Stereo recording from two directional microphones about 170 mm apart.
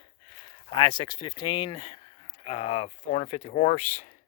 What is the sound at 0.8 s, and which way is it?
Speech, 30° left (ahead or behind).